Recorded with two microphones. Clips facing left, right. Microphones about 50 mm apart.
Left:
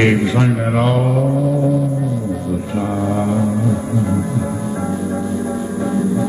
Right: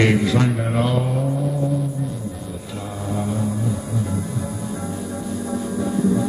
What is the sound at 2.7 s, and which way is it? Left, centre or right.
Music, left.